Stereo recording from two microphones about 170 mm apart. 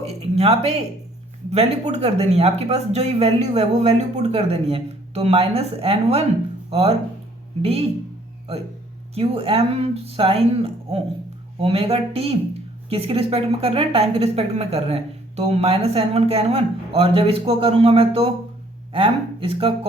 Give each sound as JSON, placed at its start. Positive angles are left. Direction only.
{"t": 0.0, "sound": "a woman's voice", "side_deg": -35}
{"t": 9.1, "sound": "a woman's voice", "side_deg": -35}